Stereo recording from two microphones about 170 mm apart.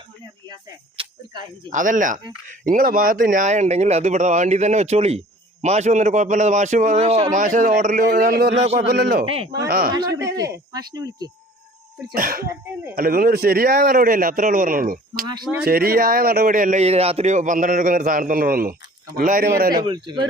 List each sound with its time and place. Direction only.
0.4 s speech: 25° right (ahead or behind)
1.7 s speech: 50° right (ahead or behind); by 8.5 s 65° right (ahead or behind)
8.5 s a man's voice: 35° right (ahead or behind)
8.9 s speech: 70° right (ahead or behind)
9.2 s a man's voice: 35° right (ahead or behind)
9.6 s speech: 60° right (ahead or behind)
9.9 s speech: 20° right (ahead or behind)
12.1 s speech: 60° right (ahead or behind)
19.7 s speech: 25° right (ahead or behind)